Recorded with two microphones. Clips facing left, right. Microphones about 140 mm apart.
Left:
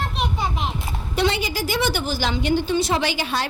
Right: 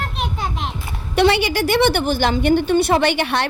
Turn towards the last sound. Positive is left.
turn(degrees=-65)  # may be behind; listen again after turning